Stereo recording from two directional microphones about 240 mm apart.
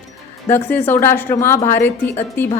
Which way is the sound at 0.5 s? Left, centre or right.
Centre.